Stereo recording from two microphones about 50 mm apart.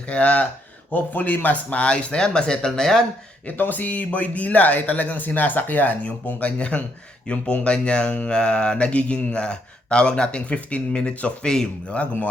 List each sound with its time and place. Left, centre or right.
0.1 s speech: left
1.8 s speech: left
3.4 s speech: left
11.4 s speech: centre